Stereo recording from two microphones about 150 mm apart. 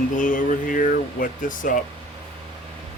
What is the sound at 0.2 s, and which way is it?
Speech, 60° left (ahead or behind).